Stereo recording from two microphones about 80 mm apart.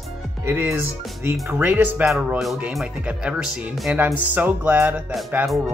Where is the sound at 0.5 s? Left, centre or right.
Right.